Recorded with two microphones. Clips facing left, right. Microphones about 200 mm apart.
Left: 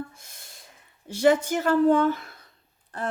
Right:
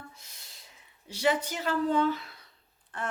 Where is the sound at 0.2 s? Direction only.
50° left (ahead or behind).